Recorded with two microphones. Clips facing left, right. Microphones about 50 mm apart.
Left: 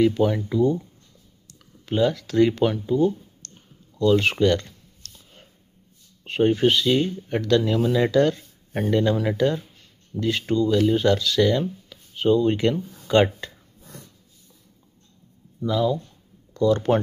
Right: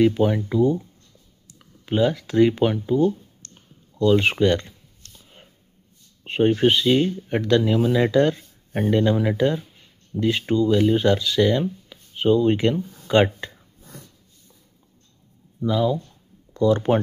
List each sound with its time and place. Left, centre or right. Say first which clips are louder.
0.0 s speech: right 1 dB; centre
3.0 s speech: right 1 dB; centre
3.5 s clicking: right 3 dB; centre
4.2 s a sound: right 1 dB; centre
6.2 s speech: right 1 dB; centre
8.4 s a sound: right 2 dB; centre
8.9 s speech: right 1 dB; centre
12.8 s a sound: even; centre
15.6 s speech: right 1 dB; centre